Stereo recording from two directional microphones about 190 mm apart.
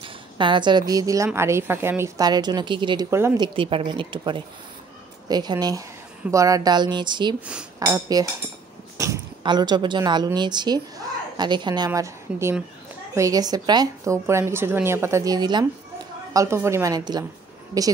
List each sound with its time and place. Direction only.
0.0 s a woman's voice: 25° right (ahead or behind)
3.1 s a woman's voice: 15° right (ahead or behind)
3.4 s a woman's voice: 30° right (ahead or behind)